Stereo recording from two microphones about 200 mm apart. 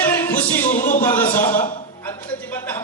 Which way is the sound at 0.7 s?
40° left (ahead or behind).